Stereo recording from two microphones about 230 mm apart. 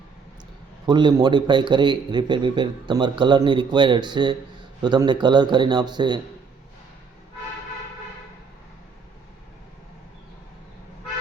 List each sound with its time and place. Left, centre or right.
0.9 s a man's voice: centre